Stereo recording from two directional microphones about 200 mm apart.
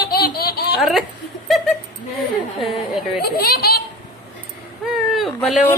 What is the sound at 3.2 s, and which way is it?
Speech, 50° left (ahead or behind).